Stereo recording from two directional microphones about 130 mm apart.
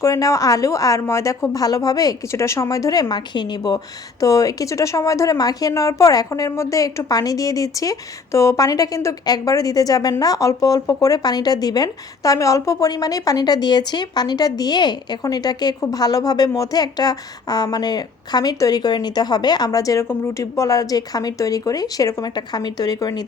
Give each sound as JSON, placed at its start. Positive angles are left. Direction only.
{"t": 0.0, "sound": "speech", "side_deg": 25}